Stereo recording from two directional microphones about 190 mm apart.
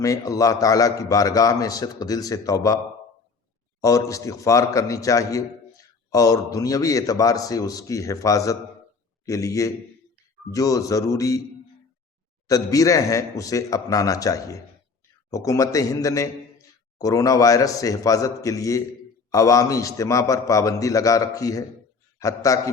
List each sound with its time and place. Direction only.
0.0 s a man's voice: 15° left (ahead or behind)
3.8 s a man's voice: 15° left (ahead or behind)
12.5 s a man's voice: 15° left (ahead or behind)